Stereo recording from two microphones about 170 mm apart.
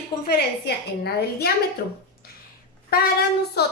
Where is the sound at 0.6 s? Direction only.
70° left (ahead or behind).